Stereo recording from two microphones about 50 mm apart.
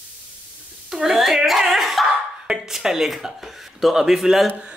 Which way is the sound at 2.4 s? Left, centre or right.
Centre.